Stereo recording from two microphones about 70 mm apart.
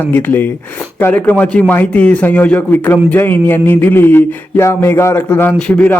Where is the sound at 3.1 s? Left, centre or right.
Left.